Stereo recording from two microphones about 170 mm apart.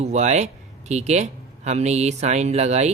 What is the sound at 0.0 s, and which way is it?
A man's voice, 40° right (ahead or behind).